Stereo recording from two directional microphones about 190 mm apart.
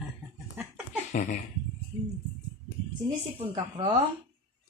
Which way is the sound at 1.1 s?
40° left (ahead or behind).